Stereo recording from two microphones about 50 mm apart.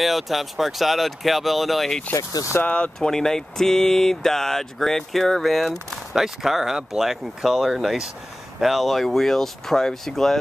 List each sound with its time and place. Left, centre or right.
0.0 s speech: centre
2.1 s speech: left
2.6 s speech: left
3.0 s speech: centre